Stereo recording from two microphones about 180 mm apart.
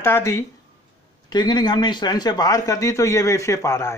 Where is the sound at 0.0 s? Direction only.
15° left (ahead or behind).